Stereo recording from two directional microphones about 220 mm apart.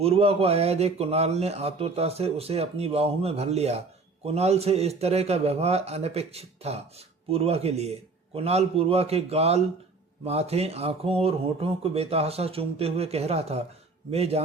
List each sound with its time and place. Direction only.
0.0 s a man's voice: 25° right (ahead or behind)